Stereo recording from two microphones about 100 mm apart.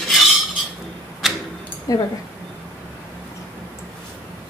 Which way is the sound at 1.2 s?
Centre (ahead or behind).